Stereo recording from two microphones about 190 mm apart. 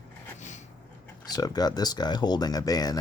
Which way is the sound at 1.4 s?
20° left (ahead or behind).